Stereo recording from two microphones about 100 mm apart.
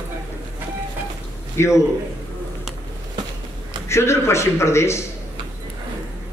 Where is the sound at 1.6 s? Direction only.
25° left (ahead or behind).